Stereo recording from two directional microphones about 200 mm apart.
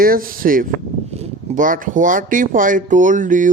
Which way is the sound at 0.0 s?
45° right (ahead or behind).